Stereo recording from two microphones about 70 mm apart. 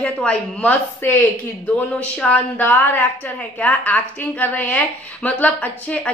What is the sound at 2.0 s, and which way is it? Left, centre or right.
Speech, centre.